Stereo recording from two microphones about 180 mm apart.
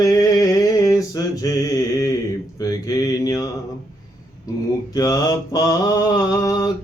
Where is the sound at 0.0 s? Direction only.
20° left (ahead or behind).